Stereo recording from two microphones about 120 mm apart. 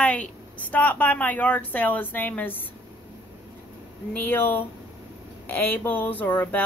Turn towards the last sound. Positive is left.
turn(degrees=15)  # may be behind; listen again after turning